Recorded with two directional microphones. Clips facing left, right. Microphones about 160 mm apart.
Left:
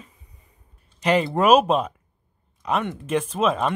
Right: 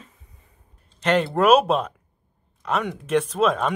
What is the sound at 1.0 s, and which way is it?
Speech, 5° left (ahead or behind).